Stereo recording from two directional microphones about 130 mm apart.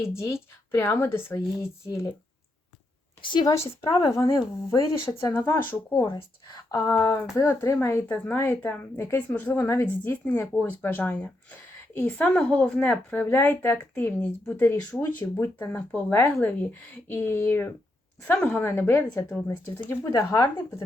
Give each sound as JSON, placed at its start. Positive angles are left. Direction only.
{"t": 0.7, "sound": "speech", "side_deg": 20}
{"t": 3.2, "sound": "a woman's voice", "side_deg": 35}
{"t": 3.5, "sound": "speech", "side_deg": 20}
{"t": 5.3, "sound": "a woman's voice", "side_deg": 15}
{"t": 19.0, "sound": "a woman's voice", "side_deg": 10}